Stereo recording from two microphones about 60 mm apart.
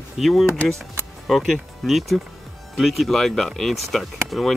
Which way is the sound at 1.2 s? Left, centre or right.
Centre.